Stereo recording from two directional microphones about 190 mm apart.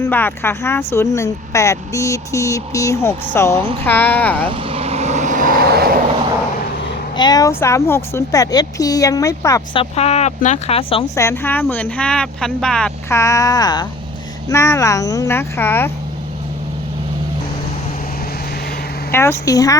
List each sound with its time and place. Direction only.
0.0 s speech: 10° left (ahead or behind)
4.4 s vehicle: 30° right (ahead or behind); by 6.0 s 55° right (ahead or behind)
7.2 s speech: 20° left (ahead or behind)
9.7 s speech: 35° left (ahead or behind)
11.1 s speech: 15° left (ahead or behind)
19.1 s speech: 10° left (ahead or behind)